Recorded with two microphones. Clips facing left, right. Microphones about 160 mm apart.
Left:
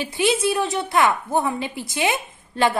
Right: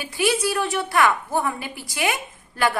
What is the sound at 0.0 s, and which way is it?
A woman's voice, 20° left (ahead or behind).